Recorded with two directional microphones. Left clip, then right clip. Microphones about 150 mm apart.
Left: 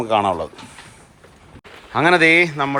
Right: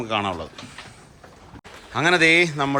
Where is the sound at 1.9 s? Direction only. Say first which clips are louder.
Left 4 dB; 15° right (ahead or behind).